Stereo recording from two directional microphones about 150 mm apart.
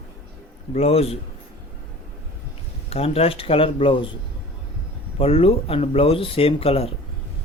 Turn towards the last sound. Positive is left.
turn(degrees=40)  # may be behind; listen again after turning